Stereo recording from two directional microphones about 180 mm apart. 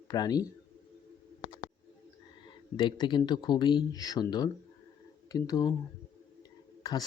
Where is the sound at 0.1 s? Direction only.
20° left (ahead or behind).